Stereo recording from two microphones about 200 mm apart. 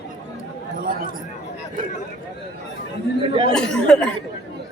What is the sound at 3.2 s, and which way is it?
Speech, 25° right (ahead or behind).